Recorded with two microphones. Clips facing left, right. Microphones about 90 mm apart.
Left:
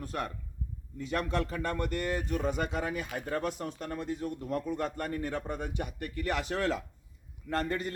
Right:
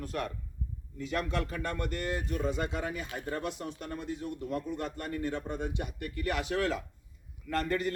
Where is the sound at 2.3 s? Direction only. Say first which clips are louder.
Left 1 dB; 50° left (ahead or behind).